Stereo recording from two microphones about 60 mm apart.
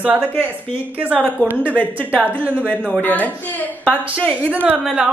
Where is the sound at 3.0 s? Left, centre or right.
Left.